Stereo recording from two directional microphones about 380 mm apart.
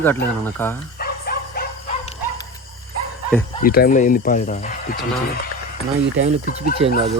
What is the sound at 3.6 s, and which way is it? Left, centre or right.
Speech, left.